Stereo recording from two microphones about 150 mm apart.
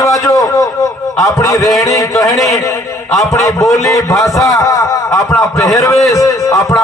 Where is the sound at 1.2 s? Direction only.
20° left (ahead or behind).